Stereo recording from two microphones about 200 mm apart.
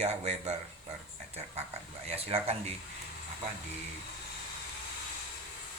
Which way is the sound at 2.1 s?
30° right (ahead or behind).